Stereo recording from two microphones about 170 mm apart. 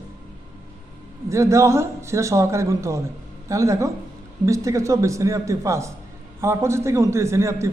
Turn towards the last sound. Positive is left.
turn(degrees=-15)  # may be behind; listen again after turning